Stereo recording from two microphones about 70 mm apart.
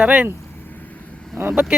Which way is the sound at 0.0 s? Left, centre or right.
Centre.